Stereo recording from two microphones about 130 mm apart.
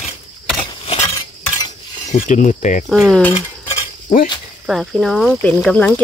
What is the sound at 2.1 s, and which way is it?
Pulleys, 80° left.